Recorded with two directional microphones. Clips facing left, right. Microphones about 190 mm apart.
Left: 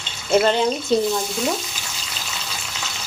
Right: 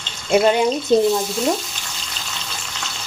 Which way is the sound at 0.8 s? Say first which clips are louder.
Right 4 dB; centre (ahead or behind).